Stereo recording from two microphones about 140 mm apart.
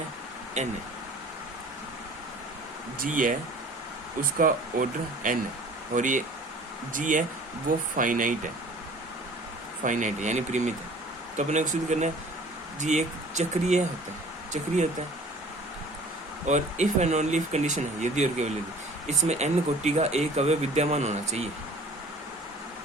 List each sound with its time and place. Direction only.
0.6 s speech: 55° right (ahead or behind)
3.0 s speech: 70° right (ahead or behind)
4.4 s speech: 75° right (ahead or behind)
5.9 s speech: 65° right (ahead or behind)
9.8 s speech: 60° right (ahead or behind)
16.5 s speech: 55° right (ahead or behind)